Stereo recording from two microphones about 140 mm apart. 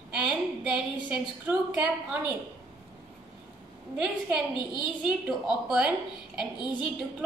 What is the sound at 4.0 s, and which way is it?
Speech, 5° right (ahead or behind).